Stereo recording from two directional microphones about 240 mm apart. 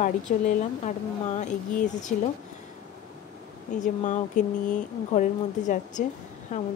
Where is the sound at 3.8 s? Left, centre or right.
Left.